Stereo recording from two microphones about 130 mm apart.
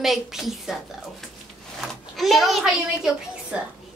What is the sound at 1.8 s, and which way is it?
A child's voice, centre (ahead or behind).